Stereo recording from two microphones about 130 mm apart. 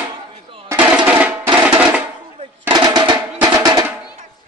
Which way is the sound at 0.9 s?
10° right (ahead or behind).